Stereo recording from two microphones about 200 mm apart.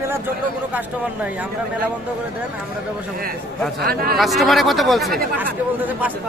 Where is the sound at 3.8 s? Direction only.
50° right (ahead or behind).